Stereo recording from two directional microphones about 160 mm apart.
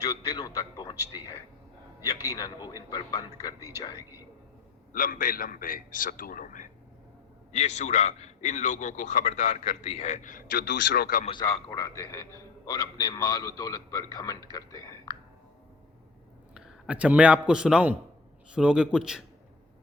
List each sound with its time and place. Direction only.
0.0 s a man's voice: 20° left (ahead or behind)
2.0 s a man's voice: 20° left (ahead or behind)
4.9 s a man's voice: 60° left (ahead or behind); by 11.2 s 85° left
11.3 s a man's voice: 25° left (ahead or behind)
16.6 s a man's voice: 5° right (ahead or behind)